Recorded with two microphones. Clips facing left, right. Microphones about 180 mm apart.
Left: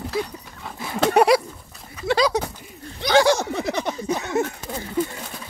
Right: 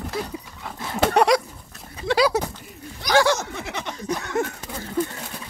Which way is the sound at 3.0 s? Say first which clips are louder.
Left 2 dB; 20° left (ahead or behind).